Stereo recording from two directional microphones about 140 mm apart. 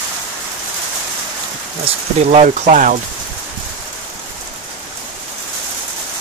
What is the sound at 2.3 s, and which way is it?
Speech, 60° right (ahead or behind).